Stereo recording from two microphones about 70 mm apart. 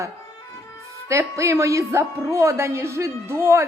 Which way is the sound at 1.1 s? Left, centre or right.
Right.